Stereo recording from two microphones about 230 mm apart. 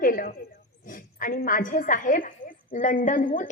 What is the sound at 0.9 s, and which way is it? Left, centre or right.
A woman's voice, left.